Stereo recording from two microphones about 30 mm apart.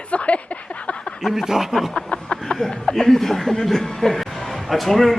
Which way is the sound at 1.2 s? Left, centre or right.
Centre.